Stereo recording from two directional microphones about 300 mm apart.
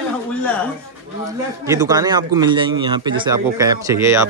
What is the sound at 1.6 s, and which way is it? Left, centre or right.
Speech, centre.